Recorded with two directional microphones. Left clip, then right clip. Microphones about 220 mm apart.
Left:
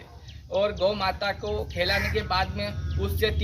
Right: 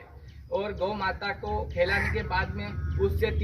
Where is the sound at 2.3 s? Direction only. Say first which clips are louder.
Left 6 dB; centre (ahead or behind).